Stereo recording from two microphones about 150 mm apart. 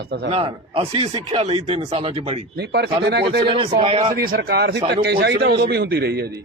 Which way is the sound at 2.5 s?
90° right.